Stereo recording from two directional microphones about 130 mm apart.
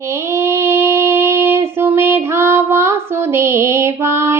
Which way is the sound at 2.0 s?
20° right (ahead or behind).